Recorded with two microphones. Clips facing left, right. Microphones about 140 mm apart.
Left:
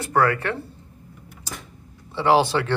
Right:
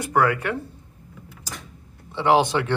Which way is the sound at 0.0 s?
15° right (ahead or behind).